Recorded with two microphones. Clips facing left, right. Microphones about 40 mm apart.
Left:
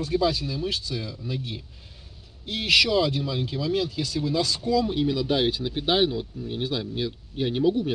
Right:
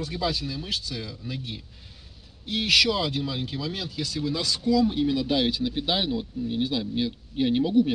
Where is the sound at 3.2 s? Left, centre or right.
Right.